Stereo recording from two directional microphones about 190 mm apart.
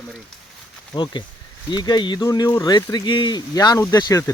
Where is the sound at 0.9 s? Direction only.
25° left (ahead or behind).